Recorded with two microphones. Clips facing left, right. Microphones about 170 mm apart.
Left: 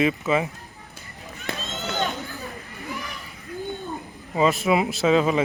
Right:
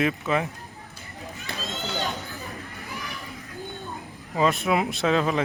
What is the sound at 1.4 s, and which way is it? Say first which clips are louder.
Run: left 3 dB; 55° left (ahead or behind).